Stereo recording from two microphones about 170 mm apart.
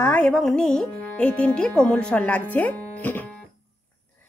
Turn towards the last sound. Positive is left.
turn(degrees=10)  # may be behind; listen again after turning